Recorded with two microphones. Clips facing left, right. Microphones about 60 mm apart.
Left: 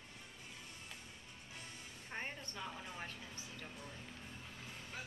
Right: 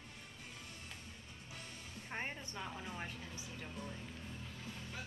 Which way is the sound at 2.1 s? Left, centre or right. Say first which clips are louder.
Right 2 dB; centre.